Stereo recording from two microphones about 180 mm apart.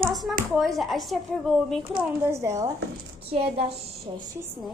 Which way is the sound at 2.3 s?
15° right (ahead or behind).